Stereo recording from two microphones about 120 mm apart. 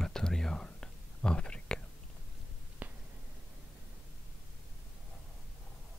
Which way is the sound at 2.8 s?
10° right (ahead or behind).